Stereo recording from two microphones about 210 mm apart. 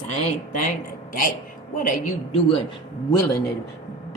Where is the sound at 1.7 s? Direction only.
40° left (ahead or behind).